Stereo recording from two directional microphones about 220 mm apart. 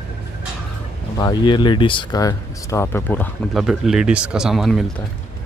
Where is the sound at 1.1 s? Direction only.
20° left (ahead or behind); by 5.0 s centre (ahead or behind).